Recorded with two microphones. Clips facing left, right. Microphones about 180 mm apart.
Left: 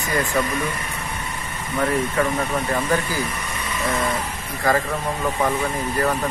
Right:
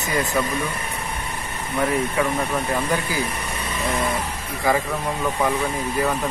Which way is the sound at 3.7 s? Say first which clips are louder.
Left 1 dB; 15° right (ahead or behind).